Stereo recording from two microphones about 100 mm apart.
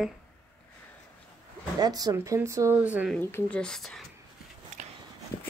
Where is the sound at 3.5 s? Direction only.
5° left (ahead or behind).